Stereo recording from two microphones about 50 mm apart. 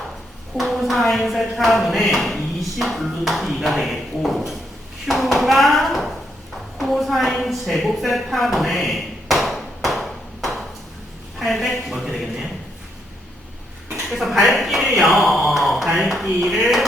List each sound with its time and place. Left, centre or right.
0.5 s speech: centre
6.7 s a sound: centre
11.3 s speech: centre
14.1 s speech: centre